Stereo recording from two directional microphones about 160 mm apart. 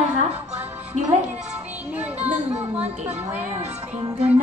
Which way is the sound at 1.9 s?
10° right (ahead or behind).